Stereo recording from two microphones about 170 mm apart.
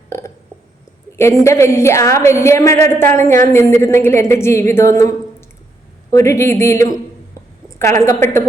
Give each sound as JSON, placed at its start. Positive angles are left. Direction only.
{"t": 1.1, "sound": "a woman's voice", "side_deg": 15}
{"t": 6.1, "sound": "a woman's voice", "side_deg": 15}